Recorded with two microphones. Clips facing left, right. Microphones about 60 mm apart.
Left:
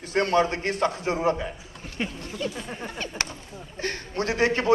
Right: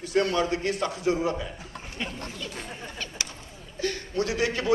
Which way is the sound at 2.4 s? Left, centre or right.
Left.